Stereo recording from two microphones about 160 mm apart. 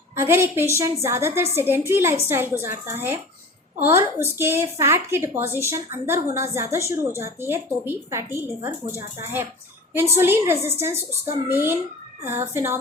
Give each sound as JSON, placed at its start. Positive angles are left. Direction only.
{"t": 0.2, "sound": "a woman's voice", "side_deg": -15}